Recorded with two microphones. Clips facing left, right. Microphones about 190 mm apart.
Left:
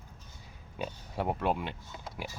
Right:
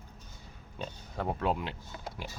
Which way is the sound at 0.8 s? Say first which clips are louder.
Left 2 dB; 10° left (ahead or behind).